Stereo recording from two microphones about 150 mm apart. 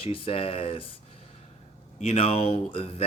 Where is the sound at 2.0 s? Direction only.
40° left (ahead or behind).